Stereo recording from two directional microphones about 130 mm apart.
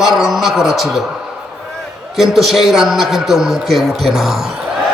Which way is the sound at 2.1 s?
Centre (ahead or behind).